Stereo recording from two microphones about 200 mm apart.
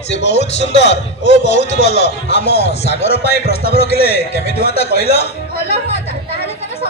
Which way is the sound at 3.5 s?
30° left (ahead or behind).